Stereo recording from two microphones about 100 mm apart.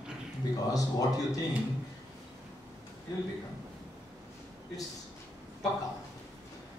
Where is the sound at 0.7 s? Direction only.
35° left (ahead or behind).